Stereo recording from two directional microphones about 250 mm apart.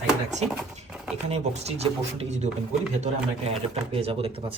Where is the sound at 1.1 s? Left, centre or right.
Right.